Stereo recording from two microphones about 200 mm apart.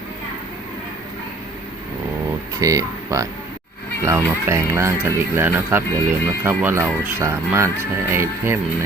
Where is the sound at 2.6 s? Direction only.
15° right (ahead or behind).